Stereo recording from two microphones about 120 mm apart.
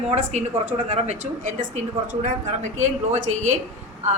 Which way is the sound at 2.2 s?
90° right.